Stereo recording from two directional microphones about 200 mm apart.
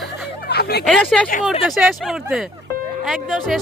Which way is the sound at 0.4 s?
55° left (ahead or behind).